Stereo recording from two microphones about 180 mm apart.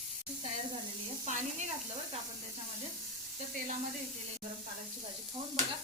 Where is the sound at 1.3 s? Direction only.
40° right (ahead or behind).